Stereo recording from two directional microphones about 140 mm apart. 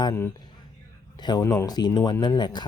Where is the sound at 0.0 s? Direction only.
20° left (ahead or behind).